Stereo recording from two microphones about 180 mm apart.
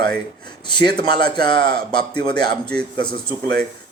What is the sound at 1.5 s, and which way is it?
Speech, 25° left (ahead or behind).